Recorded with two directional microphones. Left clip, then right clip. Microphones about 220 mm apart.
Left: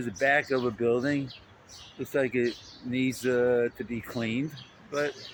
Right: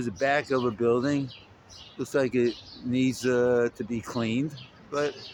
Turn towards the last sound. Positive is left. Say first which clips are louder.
# right 1 dB
turn(degrees=-10)  # may be behind; listen again after turning